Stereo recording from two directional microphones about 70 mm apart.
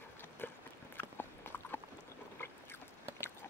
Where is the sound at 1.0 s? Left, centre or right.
Left.